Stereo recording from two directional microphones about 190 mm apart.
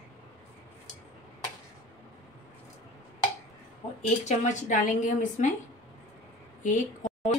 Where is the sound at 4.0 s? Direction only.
40° left (ahead or behind).